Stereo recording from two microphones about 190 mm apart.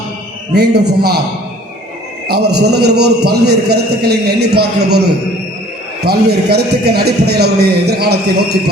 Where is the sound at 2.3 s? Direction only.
60° right (ahead or behind).